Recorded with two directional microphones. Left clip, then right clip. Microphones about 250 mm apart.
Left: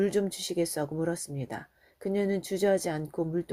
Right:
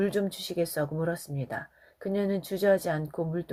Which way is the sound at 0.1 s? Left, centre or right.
Left.